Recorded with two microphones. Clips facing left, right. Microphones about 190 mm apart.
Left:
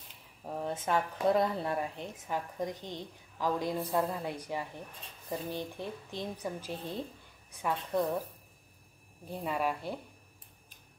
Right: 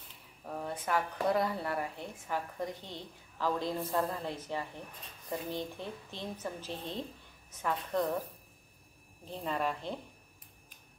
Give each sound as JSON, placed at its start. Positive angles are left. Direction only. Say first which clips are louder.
{"t": 0.5, "sound": "speech", "louder": "left 2 dB", "side_deg": 25}
{"t": 9.2, "sound": "speech", "louder": "left 1 dB", "side_deg": 10}